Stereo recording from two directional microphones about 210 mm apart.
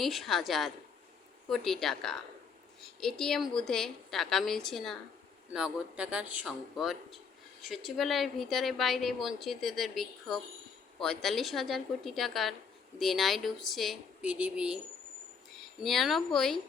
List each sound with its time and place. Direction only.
0.0 s a woman's voice: centre (ahead or behind)
15.8 s a woman's voice: centre (ahead or behind)